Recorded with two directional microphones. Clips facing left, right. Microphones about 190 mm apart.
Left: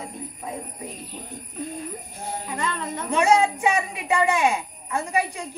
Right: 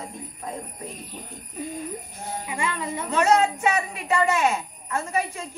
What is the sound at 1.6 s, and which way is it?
Speech, 10° right (ahead or behind).